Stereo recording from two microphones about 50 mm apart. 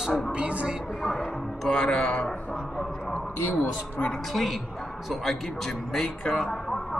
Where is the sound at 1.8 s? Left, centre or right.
Left.